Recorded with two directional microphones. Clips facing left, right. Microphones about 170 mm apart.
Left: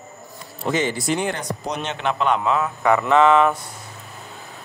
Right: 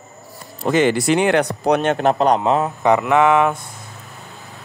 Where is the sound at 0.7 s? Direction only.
65° right (ahead or behind); by 2.7 s 35° right (ahead or behind).